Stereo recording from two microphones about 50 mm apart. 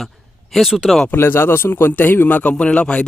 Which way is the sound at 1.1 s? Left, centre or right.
Left.